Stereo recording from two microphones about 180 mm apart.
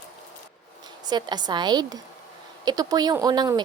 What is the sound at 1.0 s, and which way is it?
Speech, 25° right (ahead or behind).